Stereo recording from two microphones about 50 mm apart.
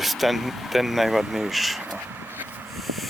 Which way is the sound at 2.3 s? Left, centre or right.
Right.